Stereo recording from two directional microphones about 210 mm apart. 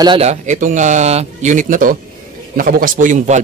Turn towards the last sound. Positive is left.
turn(degrees=-35)  # may be behind; listen again after turning